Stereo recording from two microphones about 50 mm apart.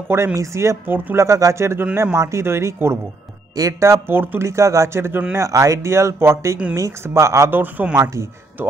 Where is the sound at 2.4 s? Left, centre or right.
Right.